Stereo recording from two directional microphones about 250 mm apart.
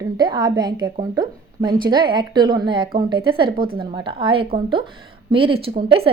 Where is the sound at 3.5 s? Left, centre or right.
Right.